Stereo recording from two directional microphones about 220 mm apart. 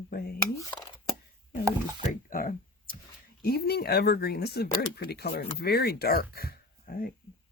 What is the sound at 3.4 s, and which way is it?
Speech, 45° left (ahead or behind).